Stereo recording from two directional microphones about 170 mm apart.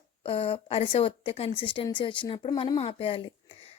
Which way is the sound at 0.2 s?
30° left (ahead or behind).